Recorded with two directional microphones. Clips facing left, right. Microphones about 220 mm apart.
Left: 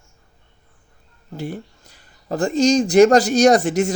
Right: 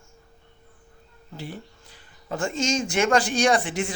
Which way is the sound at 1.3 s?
45° left (ahead or behind).